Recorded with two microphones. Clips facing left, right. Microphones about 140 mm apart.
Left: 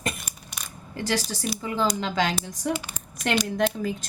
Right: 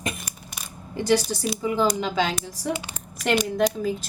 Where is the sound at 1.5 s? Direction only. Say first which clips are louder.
Right 3 dB; 15° right (ahead or behind).